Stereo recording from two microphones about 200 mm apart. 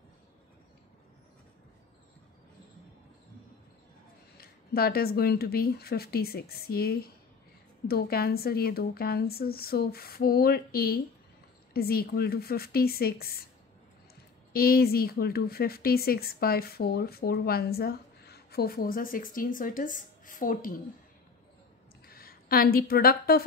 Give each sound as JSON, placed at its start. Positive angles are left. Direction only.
{"t": 4.4, "sound": "a woman's voice", "side_deg": 50}
{"t": 14.5, "sound": "a woman's voice", "side_deg": 50}
{"t": 22.0, "sound": "a woman's voice", "side_deg": 50}